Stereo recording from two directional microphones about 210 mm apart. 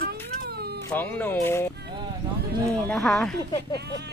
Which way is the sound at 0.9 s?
10° left (ahead or behind).